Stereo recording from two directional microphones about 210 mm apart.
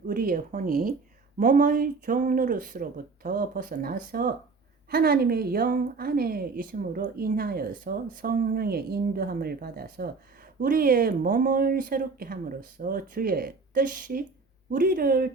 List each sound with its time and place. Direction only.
0.1 s speech: 40° right (ahead or behind)